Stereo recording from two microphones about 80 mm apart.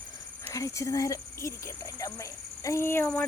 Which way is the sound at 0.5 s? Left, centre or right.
Left.